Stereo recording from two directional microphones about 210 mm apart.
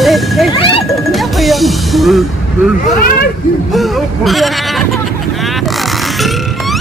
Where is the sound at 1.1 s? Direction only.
Centre (ahead or behind).